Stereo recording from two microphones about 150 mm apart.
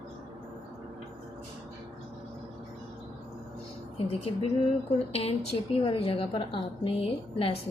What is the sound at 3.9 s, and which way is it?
A woman's voice, 40° left (ahead or behind).